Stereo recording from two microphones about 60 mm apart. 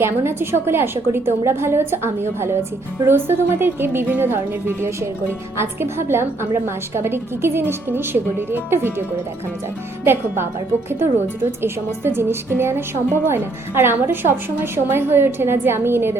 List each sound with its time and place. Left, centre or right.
0.0 s a woman's voice: right
5.5 s a woman's voice: right